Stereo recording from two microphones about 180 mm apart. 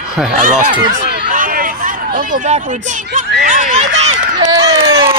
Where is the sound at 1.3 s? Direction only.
50° right (ahead or behind).